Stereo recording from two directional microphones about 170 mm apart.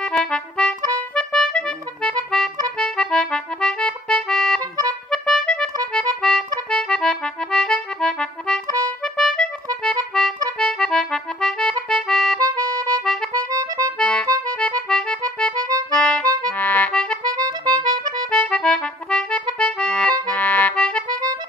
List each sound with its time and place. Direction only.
0.0 s accordion: 5° left (ahead or behind)
4.6 s music: 20° right (ahead or behind)
5.1 s music: 5° left (ahead or behind)
5.9 s accordion: 5° left (ahead or behind)
9.0 s music: 5° left (ahead or behind)
9.8 s accordion: 5° left (ahead or behind)
12.4 s music: 20° right (ahead or behind)
13.0 s accordion: 5° left (ahead or behind)
13.3 s accordion: 20° right (ahead or behind)
13.9 s accordion: 5° left (ahead or behind)
16.4 s accordion: 10° left (ahead or behind)
17.5 s music: 25° right (ahead or behind)
18.3 s accordion: 5° left (ahead or behind)